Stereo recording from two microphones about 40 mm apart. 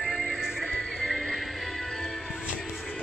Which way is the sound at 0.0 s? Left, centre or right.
Centre.